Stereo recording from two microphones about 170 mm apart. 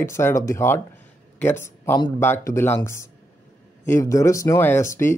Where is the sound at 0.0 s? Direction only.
15° left (ahead or behind).